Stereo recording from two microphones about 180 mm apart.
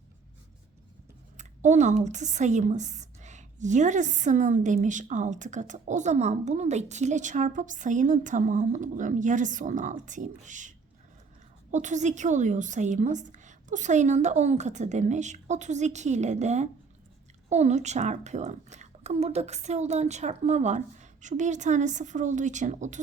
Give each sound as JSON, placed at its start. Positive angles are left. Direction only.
{"t": 1.4, "sound": "a woman's voice", "side_deg": -40}